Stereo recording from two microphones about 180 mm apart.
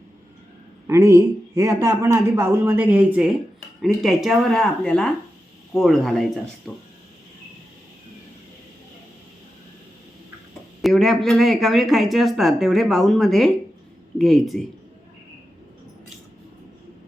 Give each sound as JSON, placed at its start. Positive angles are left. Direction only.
{"t": 0.9, "sound": "speech", "side_deg": -15}
{"t": 10.8, "sound": "speech", "side_deg": 0}